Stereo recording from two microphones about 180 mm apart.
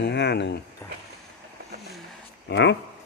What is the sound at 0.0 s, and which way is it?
Speech, 70° left (ahead or behind).